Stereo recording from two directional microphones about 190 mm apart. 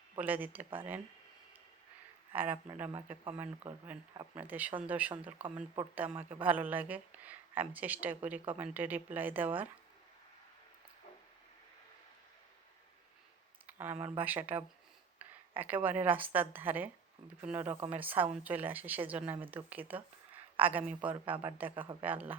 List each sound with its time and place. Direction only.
0.2 s speech: 10° right (ahead or behind)
2.3 s speech: 10° right (ahead or behind)
4.4 s speech: 10° right (ahead or behind)
13.7 s a woman's voice: 10° right (ahead or behind)